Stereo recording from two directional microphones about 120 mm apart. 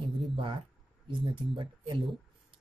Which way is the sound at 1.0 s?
45° right (ahead or behind).